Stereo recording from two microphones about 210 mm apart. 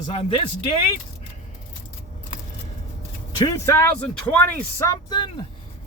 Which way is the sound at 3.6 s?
10° left (ahead or behind).